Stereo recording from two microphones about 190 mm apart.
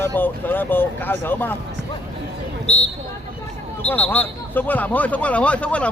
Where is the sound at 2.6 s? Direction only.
35° left (ahead or behind).